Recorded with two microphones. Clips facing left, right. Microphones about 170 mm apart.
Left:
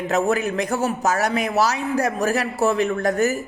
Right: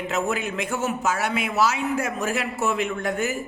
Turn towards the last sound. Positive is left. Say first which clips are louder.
# left 6 dB
turn(degrees=40)  # may be behind; listen again after turning